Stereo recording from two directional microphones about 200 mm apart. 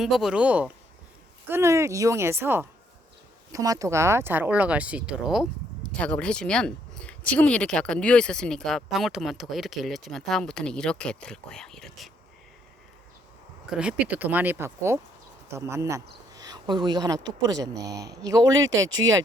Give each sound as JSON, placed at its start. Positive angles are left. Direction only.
{"t": 0.0, "sound": "speech", "side_deg": 0}
{"t": 13.7, "sound": "speech", "side_deg": -5}
{"t": 18.9, "sound": "speech", "side_deg": -75}